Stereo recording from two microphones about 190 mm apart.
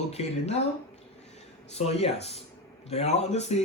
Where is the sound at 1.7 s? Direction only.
35° left (ahead or behind).